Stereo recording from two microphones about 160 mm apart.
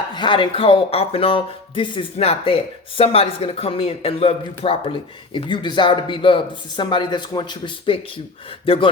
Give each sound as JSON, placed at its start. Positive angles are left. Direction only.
{"t": 0.1, "sound": "speech", "side_deg": 30}